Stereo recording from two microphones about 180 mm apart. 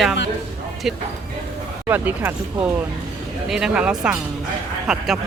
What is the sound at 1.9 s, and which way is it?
Speech, 10° right (ahead or behind).